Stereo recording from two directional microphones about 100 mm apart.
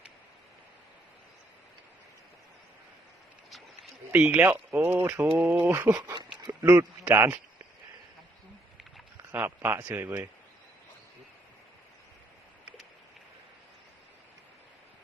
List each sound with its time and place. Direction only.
4.1 s speech: 15° right (ahead or behind)
5.7 s speech: 25° right (ahead or behind)
6.4 s a sound: 45° right (ahead or behind)
6.7 s speech: 20° right (ahead or behind)
9.3 s speech: 20° right (ahead or behind)